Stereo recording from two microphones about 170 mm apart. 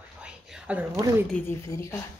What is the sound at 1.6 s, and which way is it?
Speech, 15° left (ahead or behind).